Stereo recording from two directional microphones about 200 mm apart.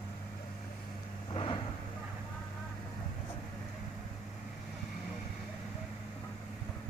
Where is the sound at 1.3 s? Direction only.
25° left (ahead or behind).